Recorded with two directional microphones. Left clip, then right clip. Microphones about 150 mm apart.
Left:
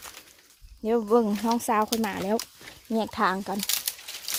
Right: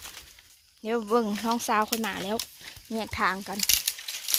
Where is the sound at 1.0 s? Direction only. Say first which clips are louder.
Left 2 dB; 25° left (ahead or behind).